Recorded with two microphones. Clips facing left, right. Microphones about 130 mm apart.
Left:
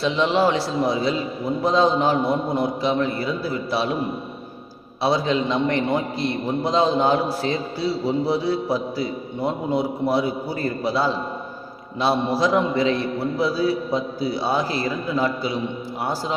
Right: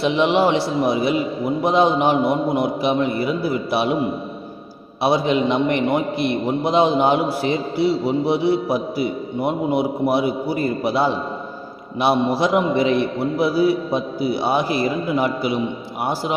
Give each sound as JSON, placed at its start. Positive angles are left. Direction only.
{"t": 0.0, "sound": "a man's voice", "side_deg": -15}
{"t": 5.0, "sound": "a man's voice", "side_deg": -15}